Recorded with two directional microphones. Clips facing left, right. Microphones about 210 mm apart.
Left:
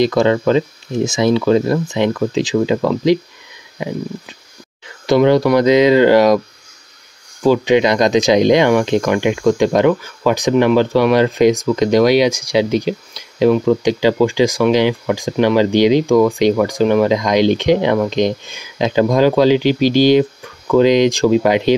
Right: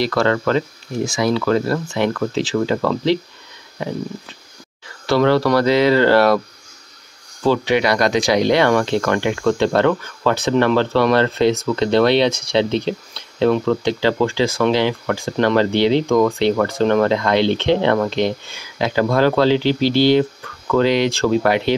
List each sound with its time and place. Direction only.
0.0 s speech: 15° left (ahead or behind)
7.4 s speech: 15° left (ahead or behind)